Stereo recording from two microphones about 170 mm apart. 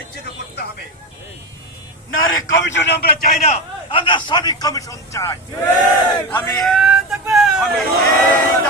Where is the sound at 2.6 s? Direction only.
80° left.